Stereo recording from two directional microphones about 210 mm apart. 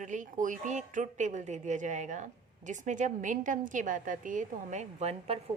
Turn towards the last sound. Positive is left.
turn(degrees=-30)  # may be behind; listen again after turning